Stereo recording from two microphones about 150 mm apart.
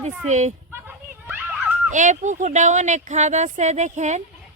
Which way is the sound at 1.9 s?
55° right (ahead or behind).